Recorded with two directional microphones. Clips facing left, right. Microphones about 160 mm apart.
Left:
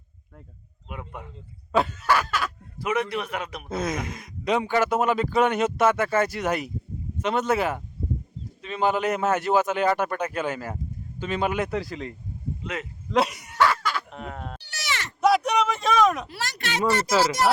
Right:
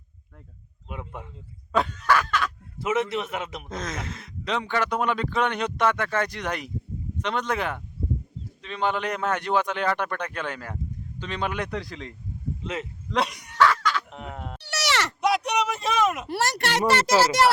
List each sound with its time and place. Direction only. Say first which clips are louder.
0.9 s a man's voice: even; 20° right (ahead or behind)
1.7 s a sound: even; 5° left (ahead or behind)
2.7 s a man's voice: right 1 dB; 25° right (ahead or behind)
3.7 s a man's voice: left 5 dB; 10° left (ahead or behind)
12.6 s a man's voice: right 1 dB; 25° right (ahead or behind)
13.1 s bow-wow: left 4 dB; 5° left (ahead or behind)
14.1 s sheep: left 1 dB; 15° right (ahead or behind)
14.6 s sheep: right 9 dB; 75° right (ahead or behind)
15.2 s a sound: left 6 dB; centre (ahead or behind)
16.3 s a child's voice: right 6 dB; 70° right (ahead or behind)